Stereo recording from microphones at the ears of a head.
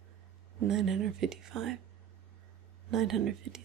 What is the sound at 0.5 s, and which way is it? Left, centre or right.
Speech, right.